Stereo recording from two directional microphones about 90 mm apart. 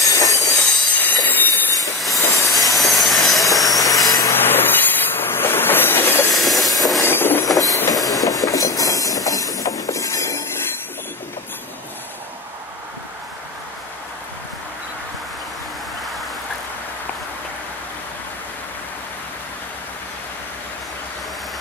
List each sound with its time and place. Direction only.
0.0 s train wheels squealing: 40° left (ahead or behind)
0.9 s train: 20° left (ahead or behind)
2.3 s railroad car: 40° left (ahead or behind)
2.7 s railroad car: centre (ahead or behind)
3.6 s train: 40° left (ahead or behind)
4.3 s train: 25° left (ahead or behind)
6.3 s train: centre (ahead or behind)
7.0 s train: 25° left (ahead or behind)
7.5 s train: 40° left (ahead or behind)